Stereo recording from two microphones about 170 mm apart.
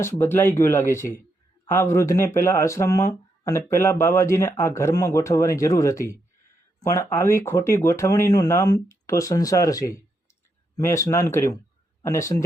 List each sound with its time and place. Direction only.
0.0 s speech: 15° left (ahead or behind)